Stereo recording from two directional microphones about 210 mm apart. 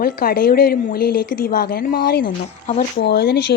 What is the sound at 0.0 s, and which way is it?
Speech, 45° left (ahead or behind).